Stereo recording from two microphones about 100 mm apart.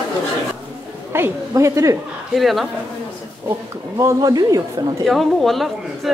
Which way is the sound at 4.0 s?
40° right (ahead or behind).